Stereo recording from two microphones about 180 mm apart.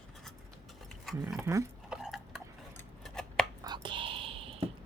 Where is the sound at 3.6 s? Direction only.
25° right (ahead or behind).